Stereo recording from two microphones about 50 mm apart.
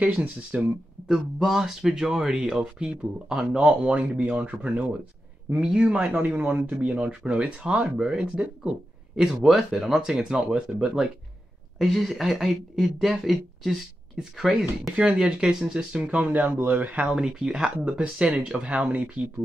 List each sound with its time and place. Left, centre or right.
0.1 s speech: right
0.6 s speech: centre; by 4.8 s right
5.6 s speech: centre
6.2 s speech: right
11.8 s speech: centre
15.0 s speech: centre; by 17.0 s right
17.0 s speech: centre
18.9 s speech: right